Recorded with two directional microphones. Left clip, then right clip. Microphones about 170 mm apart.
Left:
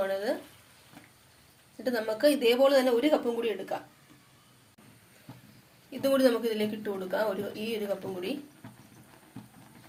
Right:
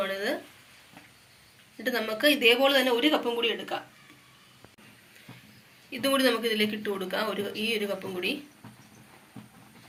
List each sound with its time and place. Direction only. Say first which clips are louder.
0.1 s a sound: even; 30° left (ahead or behind)
1.8 s speech: even; 35° left (ahead or behind)
5.9 s speech: even; 40° left (ahead or behind)